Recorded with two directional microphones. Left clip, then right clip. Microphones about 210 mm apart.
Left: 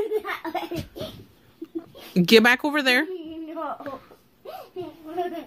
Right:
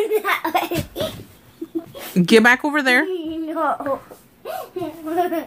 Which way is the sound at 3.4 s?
10° right (ahead or behind).